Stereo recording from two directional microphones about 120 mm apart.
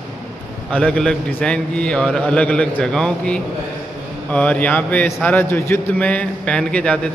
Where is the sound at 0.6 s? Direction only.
5° left (ahead or behind).